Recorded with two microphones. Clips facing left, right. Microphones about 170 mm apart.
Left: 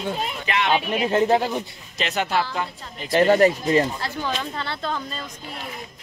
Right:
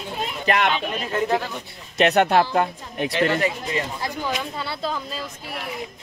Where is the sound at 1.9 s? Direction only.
60° right (ahead or behind).